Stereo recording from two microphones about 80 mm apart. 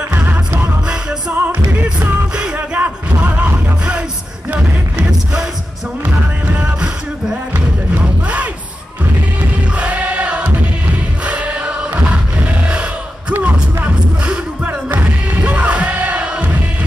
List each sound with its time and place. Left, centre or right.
0.1 s music: right
6.4 s music: centre
9.8 s choir: centre
12.6 s music: centre